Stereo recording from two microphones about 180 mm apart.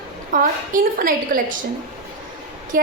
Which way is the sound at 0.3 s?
50° right (ahead or behind).